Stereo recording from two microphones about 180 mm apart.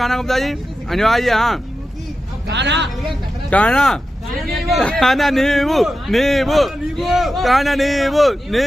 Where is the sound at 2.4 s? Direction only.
75° right (ahead or behind).